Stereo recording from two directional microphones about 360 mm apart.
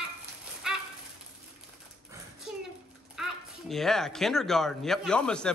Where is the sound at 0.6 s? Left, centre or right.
Centre.